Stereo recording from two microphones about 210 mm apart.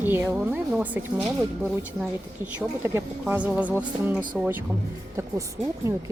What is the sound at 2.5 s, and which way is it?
Speech, 10° right (ahead or behind).